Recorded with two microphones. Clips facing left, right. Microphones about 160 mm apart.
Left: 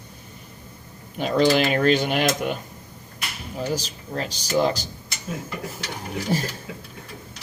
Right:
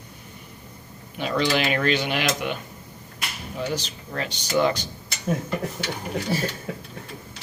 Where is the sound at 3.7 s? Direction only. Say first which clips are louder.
Left 2 dB; 35° left (ahead or behind).